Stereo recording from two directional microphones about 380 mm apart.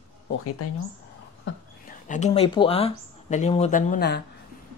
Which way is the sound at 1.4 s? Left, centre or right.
Left.